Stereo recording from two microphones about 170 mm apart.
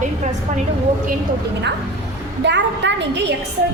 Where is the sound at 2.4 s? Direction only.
90° right.